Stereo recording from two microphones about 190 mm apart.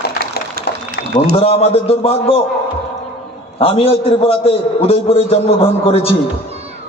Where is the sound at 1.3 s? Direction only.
30° left (ahead or behind).